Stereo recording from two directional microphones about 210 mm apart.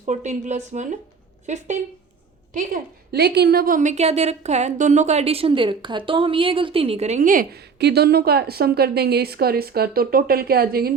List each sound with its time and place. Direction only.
0.0 s a woman's voice: 35° right (ahead or behind)